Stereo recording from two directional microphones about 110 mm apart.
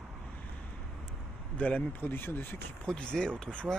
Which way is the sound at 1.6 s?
15° left (ahead or behind).